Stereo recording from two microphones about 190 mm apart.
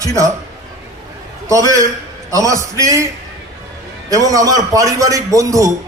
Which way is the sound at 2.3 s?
15° right (ahead or behind).